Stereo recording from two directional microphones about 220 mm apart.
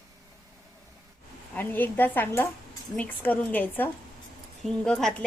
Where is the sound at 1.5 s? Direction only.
10° left (ahead or behind).